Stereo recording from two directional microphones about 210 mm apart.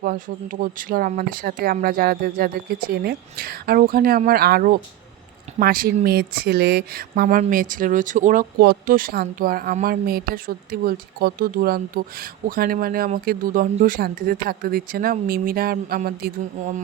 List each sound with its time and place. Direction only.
0.0 s speech: 40° right (ahead or behind)